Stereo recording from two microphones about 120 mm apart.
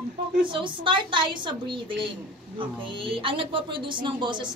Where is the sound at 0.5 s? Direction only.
45° right (ahead or behind).